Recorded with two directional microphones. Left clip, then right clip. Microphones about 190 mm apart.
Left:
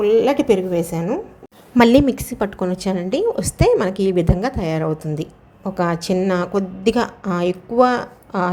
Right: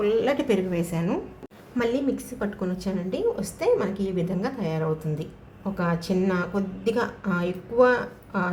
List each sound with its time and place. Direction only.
0.0 s a woman's voice: 20° left (ahead or behind)
1.8 s a woman's voice: 45° left (ahead or behind)